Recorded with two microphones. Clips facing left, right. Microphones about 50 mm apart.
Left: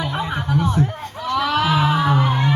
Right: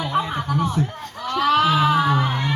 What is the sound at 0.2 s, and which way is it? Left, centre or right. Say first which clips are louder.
Chuckle: right 1 dB; left.